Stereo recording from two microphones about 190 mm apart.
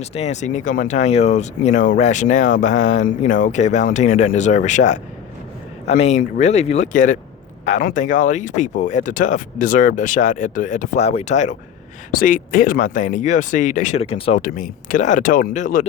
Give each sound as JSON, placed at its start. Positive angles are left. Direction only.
{"t": 0.0, "sound": "speech", "side_deg": 35}
{"t": 14.4, "sound": "speech", "side_deg": 45}